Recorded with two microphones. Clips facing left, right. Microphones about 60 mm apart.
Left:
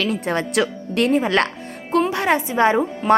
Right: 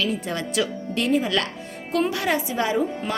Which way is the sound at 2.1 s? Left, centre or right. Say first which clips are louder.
Left 5 dB; left.